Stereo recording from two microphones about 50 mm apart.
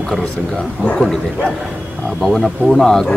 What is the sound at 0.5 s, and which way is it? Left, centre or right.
Speech, left.